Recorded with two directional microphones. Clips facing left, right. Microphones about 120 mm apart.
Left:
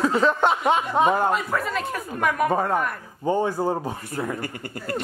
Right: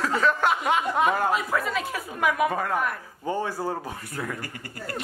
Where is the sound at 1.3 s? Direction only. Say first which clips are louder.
Left 1 dB; centre (ahead or behind).